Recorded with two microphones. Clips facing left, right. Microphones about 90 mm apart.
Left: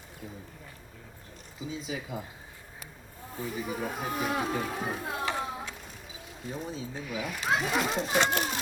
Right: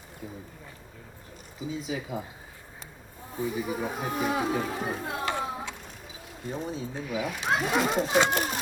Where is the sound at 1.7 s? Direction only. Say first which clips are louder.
Right 3 dB; centre (ahead or behind).